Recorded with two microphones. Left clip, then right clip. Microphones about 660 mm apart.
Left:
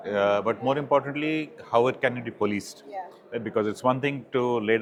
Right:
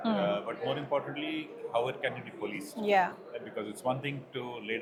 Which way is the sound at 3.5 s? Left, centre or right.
Left.